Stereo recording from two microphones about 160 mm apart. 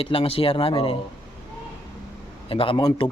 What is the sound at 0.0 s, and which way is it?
Speech, 35° left (ahead or behind).